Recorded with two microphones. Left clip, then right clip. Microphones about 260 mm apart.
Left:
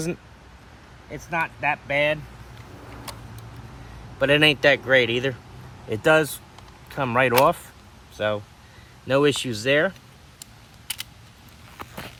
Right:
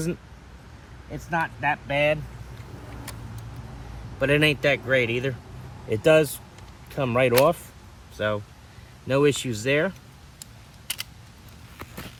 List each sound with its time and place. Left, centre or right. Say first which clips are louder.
1.1 s speech: left 1 dB; centre
4.2 s speech: left 4 dB; centre
11.8 s a sound: left 3 dB; left